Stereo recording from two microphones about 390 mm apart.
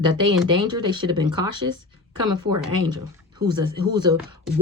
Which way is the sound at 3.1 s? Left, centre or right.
Centre.